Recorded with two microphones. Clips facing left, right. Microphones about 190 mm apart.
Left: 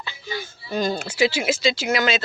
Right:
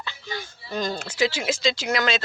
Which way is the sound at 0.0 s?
10° left (ahead or behind).